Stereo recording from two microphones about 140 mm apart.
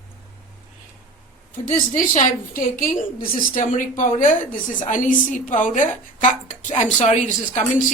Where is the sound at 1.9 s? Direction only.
65° left (ahead or behind).